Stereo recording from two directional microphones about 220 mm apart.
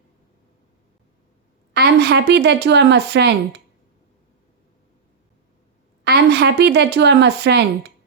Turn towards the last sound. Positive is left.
turn(degrees=-50)  # may be behind; listen again after turning